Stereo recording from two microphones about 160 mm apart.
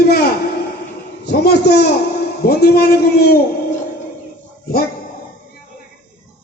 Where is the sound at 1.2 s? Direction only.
90° left.